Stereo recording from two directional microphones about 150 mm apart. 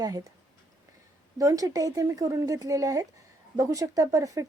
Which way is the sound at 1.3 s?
25° right (ahead or behind).